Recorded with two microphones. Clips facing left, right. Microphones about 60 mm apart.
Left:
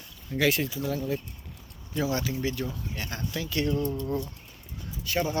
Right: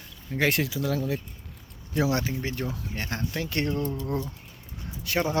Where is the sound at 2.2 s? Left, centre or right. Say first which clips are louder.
Even; right.